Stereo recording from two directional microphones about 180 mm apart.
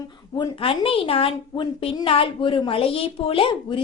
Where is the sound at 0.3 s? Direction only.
25° left (ahead or behind).